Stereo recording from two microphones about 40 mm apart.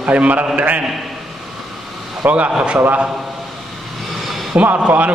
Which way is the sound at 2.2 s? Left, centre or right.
Right.